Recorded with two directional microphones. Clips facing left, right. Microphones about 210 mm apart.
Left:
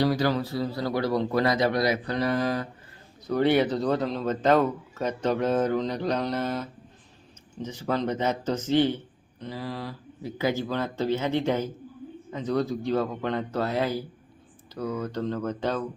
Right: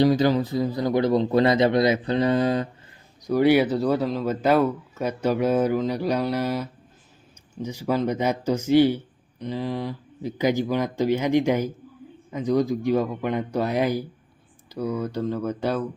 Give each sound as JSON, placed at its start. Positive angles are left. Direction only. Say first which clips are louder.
{"t": 0.0, "sound": "speech", "louder": "right 5 dB", "side_deg": -20}
{"t": 3.2, "sound": "a man's voice", "louder": "right 4 dB", "side_deg": -10}